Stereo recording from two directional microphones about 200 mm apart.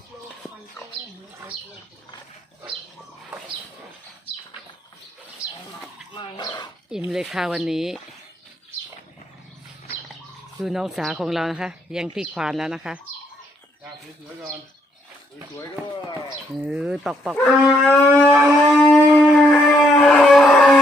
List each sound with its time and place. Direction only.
6.1 s dog: 20° left (ahead or behind)
7.1 s speech: centre (ahead or behind)
10.6 s speech: centre (ahead or behind)
16.6 s speech: 5° right (ahead or behind)
18.8 s shofar: centre (ahead or behind)